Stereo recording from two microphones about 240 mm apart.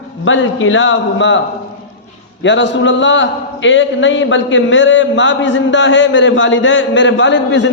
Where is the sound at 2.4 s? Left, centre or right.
Left.